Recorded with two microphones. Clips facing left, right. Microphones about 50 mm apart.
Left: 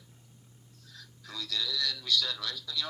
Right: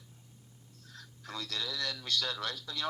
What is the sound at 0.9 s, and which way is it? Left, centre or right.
Speech, right.